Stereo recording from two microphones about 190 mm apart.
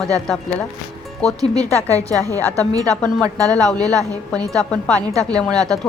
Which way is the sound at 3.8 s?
20° right (ahead or behind).